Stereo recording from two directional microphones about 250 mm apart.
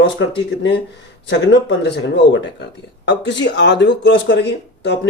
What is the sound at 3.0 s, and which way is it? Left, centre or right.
Speech, left.